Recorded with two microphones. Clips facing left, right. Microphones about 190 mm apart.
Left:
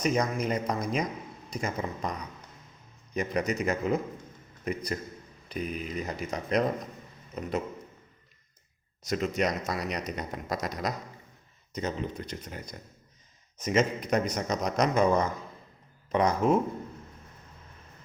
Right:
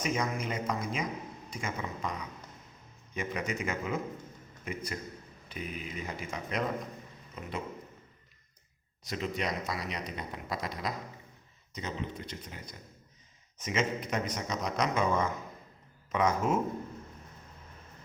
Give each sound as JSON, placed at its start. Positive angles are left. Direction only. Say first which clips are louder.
{"t": 0.0, "sound": "a man's voice", "louder": "left 5 dB", "side_deg": 40}
{"t": 3.2, "sound": "a man's voice", "louder": "left 6 dB", "side_deg": 40}
{"t": 9.0, "sound": "a man's voice", "louder": "left 6 dB", "side_deg": 45}